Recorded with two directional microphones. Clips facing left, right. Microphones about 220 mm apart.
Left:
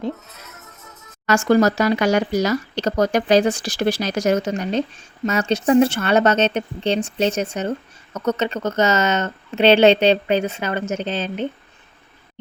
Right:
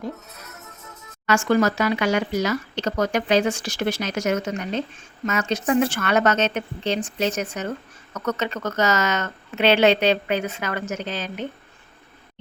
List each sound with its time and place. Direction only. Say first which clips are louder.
1.3 s speech: left 4 dB; 40° left (ahead or behind)